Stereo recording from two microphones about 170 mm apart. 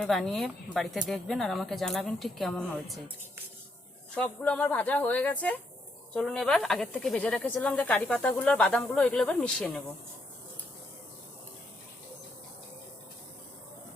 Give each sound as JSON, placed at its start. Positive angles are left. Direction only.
{"t": 0.0, "sound": "speech", "side_deg": 0}
{"t": 4.1, "sound": "speech", "side_deg": 5}